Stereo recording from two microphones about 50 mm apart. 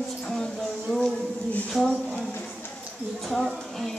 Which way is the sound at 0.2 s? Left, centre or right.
Centre.